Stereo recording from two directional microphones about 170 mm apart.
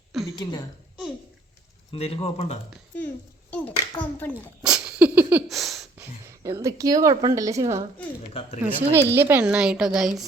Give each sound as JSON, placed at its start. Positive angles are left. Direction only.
{"t": 1.9, "sound": "speech", "side_deg": 35}
{"t": 3.9, "sound": "a child's voice", "side_deg": 5}
{"t": 4.6, "sound": "a sound", "side_deg": -5}
{"t": 6.0, "sound": "speech", "side_deg": -15}
{"t": 8.3, "sound": "a woman's voice", "side_deg": 35}
{"t": 8.6, "sound": "a woman's voice", "side_deg": -15}